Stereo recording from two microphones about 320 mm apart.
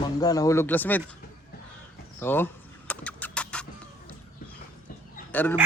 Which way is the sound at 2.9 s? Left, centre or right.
Centre.